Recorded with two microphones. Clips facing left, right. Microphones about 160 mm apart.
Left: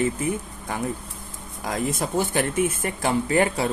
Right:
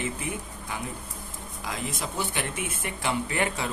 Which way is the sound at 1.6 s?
45° left (ahead or behind).